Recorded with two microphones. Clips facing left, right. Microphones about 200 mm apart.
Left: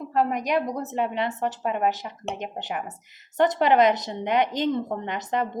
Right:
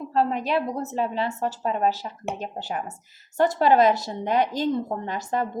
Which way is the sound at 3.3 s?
20° left (ahead or behind).